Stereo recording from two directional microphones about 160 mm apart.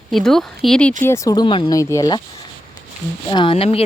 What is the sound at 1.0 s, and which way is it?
Speech, 15° left (ahead or behind).